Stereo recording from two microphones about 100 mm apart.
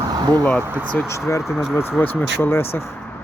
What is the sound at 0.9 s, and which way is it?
Speech, 25° left (ahead or behind).